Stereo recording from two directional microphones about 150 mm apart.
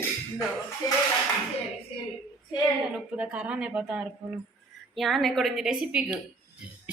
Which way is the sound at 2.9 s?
5° right (ahead or behind).